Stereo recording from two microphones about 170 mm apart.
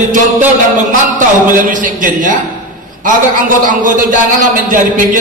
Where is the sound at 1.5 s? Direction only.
50° right (ahead or behind).